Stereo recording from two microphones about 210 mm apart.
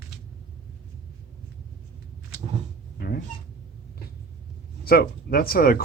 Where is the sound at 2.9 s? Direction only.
45° left (ahead or behind).